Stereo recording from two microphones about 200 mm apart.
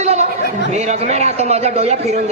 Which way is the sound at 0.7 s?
35° right (ahead or behind).